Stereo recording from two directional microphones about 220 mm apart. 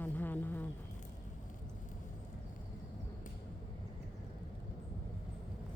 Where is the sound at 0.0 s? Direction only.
10° left (ahead or behind).